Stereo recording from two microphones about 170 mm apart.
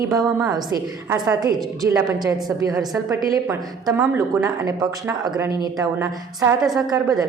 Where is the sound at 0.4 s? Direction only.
20° right (ahead or behind).